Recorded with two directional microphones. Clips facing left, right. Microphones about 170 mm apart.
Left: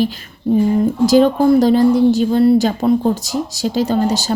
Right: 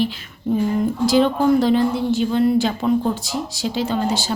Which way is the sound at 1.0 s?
40° left (ahead or behind).